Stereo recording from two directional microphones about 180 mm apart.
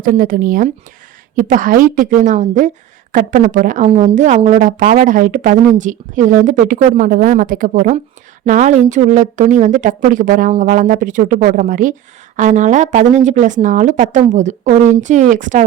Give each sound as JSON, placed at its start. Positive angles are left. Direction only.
{"t": 0.0, "sound": "speech", "side_deg": -50}